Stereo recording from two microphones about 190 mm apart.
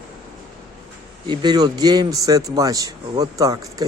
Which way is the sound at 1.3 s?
25° right (ahead or behind).